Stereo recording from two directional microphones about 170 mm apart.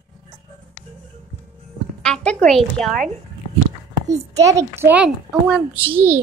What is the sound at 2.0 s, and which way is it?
Music, 5° left (ahead or behind).